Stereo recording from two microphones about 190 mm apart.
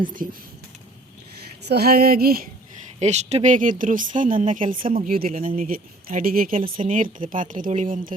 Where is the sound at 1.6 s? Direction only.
55° right (ahead or behind).